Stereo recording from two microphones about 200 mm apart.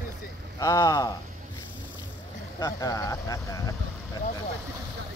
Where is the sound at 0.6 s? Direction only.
15° left (ahead or behind).